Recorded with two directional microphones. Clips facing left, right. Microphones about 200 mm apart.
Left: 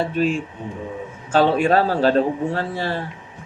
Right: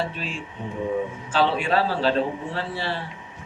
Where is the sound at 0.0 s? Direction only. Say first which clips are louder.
Left 9 dB; 45° left (ahead or behind).